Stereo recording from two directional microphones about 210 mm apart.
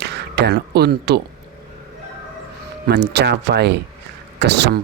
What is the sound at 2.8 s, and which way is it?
Speech, 50° right (ahead or behind).